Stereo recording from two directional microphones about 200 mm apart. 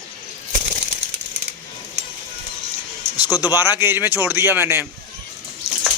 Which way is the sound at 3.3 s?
20° left (ahead or behind).